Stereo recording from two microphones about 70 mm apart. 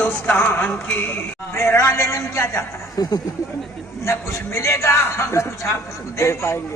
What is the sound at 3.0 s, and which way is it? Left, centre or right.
Speech, left.